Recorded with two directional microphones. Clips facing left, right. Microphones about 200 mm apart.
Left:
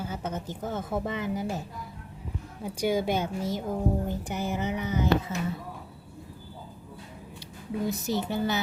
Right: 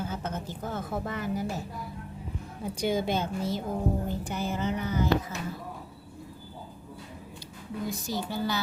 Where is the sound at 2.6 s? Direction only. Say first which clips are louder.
Left 1 dB; 10° left (ahead or behind).